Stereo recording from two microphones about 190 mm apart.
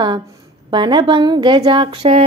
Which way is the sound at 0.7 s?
25° right (ahead or behind).